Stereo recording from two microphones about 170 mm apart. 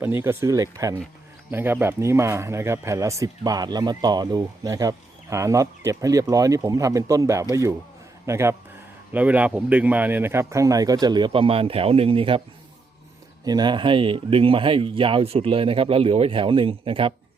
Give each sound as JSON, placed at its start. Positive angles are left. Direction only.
{"t": 0.0, "sound": "speech", "side_deg": -15}
{"t": 13.4, "sound": "speech", "side_deg": -25}